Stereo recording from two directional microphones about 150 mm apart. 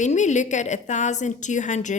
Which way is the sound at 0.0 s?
55° left (ahead or behind).